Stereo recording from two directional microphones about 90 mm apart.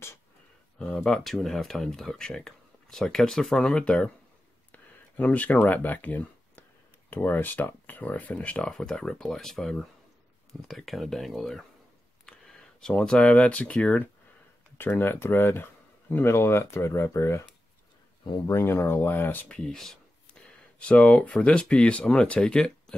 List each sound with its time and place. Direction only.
1.0 s speech: 5° left (ahead or behind)
12.8 s speech: 10° left (ahead or behind); by 17.4 s 35° left (ahead or behind)
18.5 s speech: 35° left (ahead or behind)
19.5 s speech: 10° left (ahead or behind)